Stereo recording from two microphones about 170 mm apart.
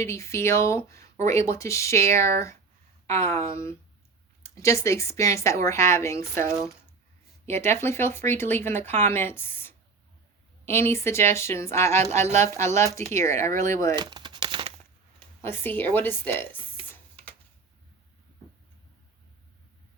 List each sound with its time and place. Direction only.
0.0 s speech: 15° left (ahead or behind)
12.1 s a woman's voice: 40° right (ahead or behind)
12.4 s speech: 15° left (ahead or behind)
13.9 s crumpling: 25° right (ahead or behind)
15.2 s speech: 10° left (ahead or behind)